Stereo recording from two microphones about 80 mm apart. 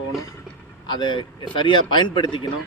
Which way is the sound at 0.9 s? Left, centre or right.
Left.